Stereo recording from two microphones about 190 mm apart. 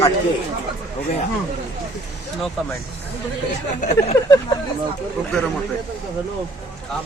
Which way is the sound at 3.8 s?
40° left (ahead or behind).